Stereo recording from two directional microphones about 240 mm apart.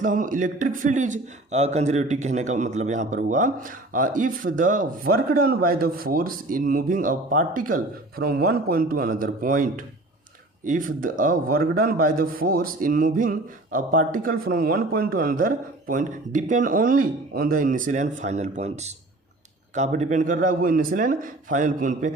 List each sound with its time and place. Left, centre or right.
0.0 s a man's voice: right